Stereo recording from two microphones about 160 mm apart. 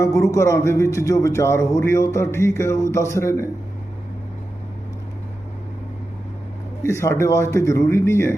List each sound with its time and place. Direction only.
0.0 s a man's voice: 20° left (ahead or behind)
6.8 s a man's voice: 15° left (ahead or behind)